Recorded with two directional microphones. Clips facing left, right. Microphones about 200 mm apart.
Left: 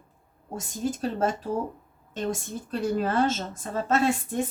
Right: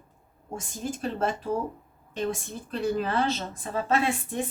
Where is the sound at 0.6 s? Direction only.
40° left (ahead or behind).